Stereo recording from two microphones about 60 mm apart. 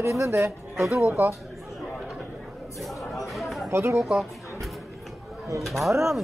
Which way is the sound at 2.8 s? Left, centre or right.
Centre.